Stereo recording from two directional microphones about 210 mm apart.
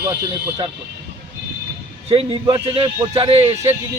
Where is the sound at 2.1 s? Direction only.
25° right (ahead or behind).